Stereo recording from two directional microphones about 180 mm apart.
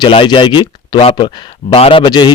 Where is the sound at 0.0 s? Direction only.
25° left (ahead or behind).